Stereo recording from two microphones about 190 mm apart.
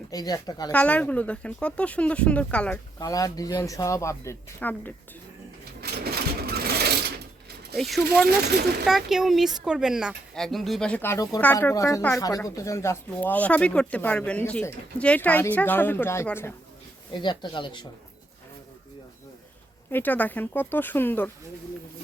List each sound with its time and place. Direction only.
0.1 s speech: 20° left (ahead or behind)
0.7 s speech: 5° left (ahead or behind)
3.0 s speech: 20° left (ahead or behind)
5.8 s sewing machine: 55° right (ahead or behind)
7.8 s speech: centre (ahead or behind)
8.3 s speech: 55° right (ahead or behind)
8.9 s speech: centre (ahead or behind)
17.1 s speech: 25° left (ahead or behind)
19.9 s speech: 10° left (ahead or behind)